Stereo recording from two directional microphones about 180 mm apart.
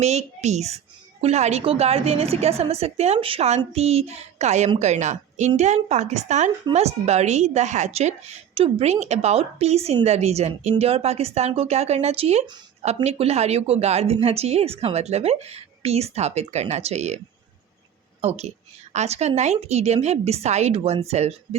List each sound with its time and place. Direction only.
0.0 s a woman's voice: 40° right (ahead or behind)
18.2 s a woman's voice: 35° right (ahead or behind)